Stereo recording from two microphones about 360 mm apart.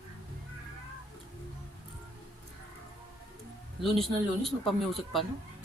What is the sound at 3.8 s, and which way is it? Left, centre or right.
A man's voice, centre.